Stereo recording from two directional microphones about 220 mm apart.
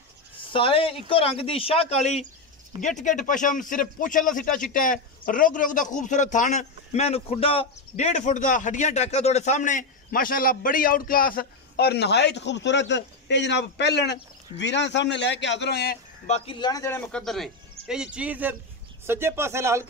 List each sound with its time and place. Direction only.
0.5 s a man's voice: 25° left (ahead or behind); by 16.0 s 45° left (ahead or behind)
16.3 s a man's voice: 25° left (ahead or behind); by 19.9 s 10° right (ahead or behind)